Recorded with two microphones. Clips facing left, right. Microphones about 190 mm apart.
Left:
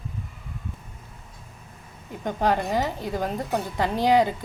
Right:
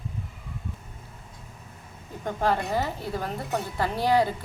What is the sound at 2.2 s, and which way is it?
A woman's voice, 15° left (ahead or behind).